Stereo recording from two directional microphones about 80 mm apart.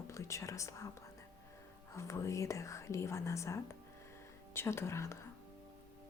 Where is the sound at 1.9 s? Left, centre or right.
Left.